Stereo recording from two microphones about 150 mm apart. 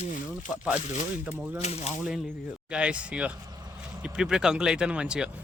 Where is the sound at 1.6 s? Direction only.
45° left (ahead or behind).